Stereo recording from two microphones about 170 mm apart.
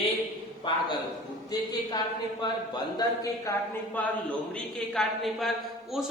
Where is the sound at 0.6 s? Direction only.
30° left (ahead or behind).